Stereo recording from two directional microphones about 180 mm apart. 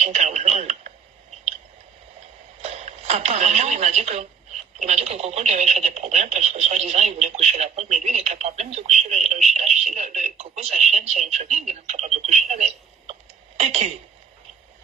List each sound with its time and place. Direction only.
0.0 s radio: 40° right (ahead or behind)
2.6 s speech: 35° right (ahead or behind)